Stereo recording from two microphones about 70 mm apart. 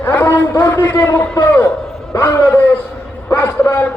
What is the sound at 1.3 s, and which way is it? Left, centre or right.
A man's voice, left.